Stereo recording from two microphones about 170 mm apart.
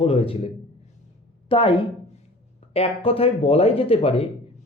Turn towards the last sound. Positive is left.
turn(degrees=35)  # may be behind; listen again after turning